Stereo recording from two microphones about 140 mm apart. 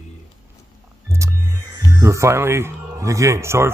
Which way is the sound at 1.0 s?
20° right (ahead or behind).